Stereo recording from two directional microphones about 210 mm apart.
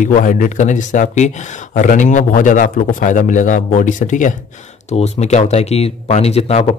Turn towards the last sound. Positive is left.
turn(degrees=30)  # may be behind; listen again after turning